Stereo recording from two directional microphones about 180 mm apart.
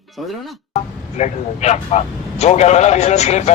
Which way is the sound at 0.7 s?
40° left (ahead or behind).